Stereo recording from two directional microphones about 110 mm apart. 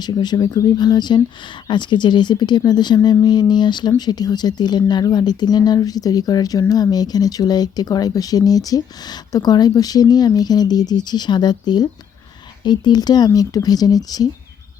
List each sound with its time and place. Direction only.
0.0 s speech: 40° left (ahead or behind)